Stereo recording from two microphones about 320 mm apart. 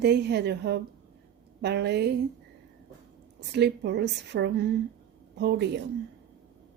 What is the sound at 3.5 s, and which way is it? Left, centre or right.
A woman's voice, right.